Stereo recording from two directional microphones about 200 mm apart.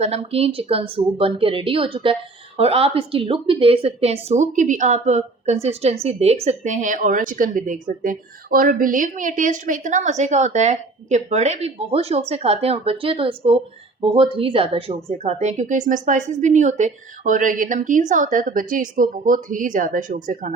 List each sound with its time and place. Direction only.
0.0 s a woman's voice: 30° right (ahead or behind)